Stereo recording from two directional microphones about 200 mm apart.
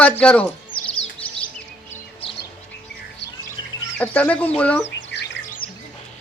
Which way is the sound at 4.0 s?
5° left (ahead or behind).